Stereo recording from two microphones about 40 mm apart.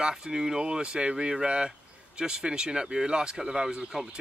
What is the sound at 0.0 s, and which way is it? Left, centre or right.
Speech, centre.